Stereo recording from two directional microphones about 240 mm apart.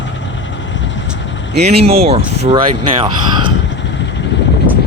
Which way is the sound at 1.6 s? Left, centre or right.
Right.